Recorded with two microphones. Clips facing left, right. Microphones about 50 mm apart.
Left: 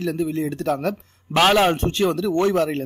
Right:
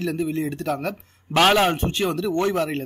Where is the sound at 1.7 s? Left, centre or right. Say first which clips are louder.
Left 3 dB; right.